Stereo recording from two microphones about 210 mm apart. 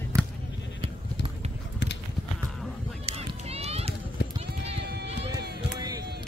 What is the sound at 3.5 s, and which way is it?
Run, 30° right (ahead or behind).